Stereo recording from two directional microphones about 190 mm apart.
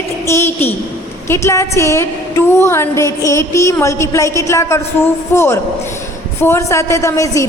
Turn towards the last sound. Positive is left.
turn(degrees=15)  # may be behind; listen again after turning